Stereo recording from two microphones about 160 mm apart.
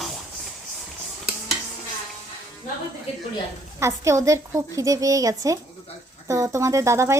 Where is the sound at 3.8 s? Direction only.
20° right (ahead or behind).